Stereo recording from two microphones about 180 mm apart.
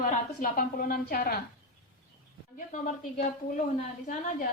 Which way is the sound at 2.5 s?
50° left (ahead or behind).